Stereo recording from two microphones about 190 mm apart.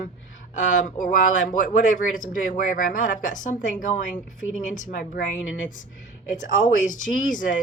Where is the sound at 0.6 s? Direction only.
45° left (ahead or behind).